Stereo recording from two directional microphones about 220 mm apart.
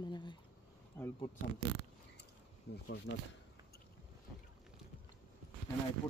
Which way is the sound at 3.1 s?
60° left (ahead or behind).